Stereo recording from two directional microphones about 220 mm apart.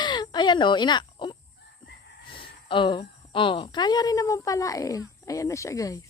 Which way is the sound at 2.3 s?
25° left (ahead or behind).